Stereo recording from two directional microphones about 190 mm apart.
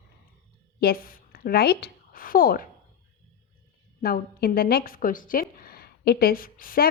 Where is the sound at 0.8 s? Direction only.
50° left (ahead or behind).